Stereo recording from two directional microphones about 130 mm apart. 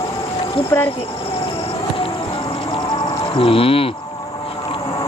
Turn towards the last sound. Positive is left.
turn(degrees=45)  # may be behind; listen again after turning